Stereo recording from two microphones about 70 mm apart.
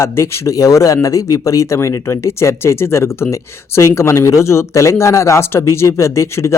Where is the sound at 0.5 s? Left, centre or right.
Left.